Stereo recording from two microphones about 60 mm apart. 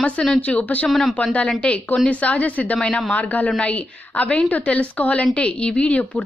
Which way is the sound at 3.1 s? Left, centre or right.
Left.